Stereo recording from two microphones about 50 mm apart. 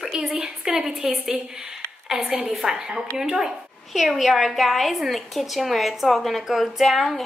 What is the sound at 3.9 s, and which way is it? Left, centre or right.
A woman's voice, centre.